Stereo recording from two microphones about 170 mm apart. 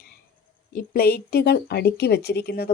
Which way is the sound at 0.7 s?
60° left (ahead or behind).